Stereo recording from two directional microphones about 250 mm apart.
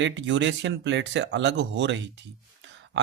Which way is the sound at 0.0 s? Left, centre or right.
Right.